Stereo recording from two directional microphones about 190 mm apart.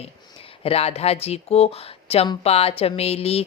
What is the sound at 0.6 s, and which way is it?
Speech, 30° left (ahead or behind).